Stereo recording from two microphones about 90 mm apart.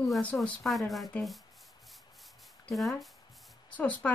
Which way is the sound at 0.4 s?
Centre (ahead or behind).